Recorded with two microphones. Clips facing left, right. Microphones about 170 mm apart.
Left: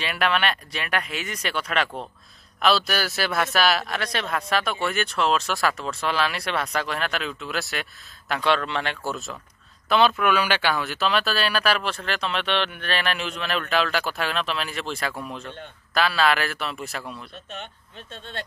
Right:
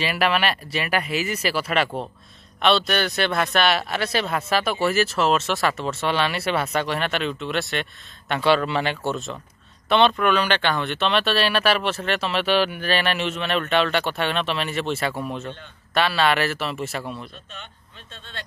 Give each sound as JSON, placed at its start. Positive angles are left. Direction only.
{"t": 0.0, "sound": "speech", "side_deg": -5}
{"t": 18.1, "sound": "speech", "side_deg": 50}